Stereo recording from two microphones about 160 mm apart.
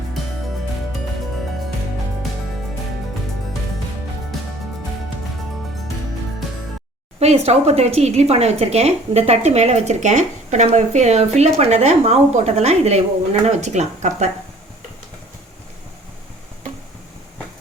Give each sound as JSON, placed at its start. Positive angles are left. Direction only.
{"t": 7.2, "sound": "speech", "side_deg": -40}